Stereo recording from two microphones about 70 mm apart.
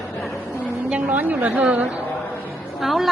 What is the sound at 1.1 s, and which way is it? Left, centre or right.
Speech, right.